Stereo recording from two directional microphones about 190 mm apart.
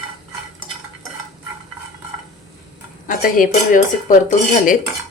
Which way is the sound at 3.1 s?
45° left (ahead or behind).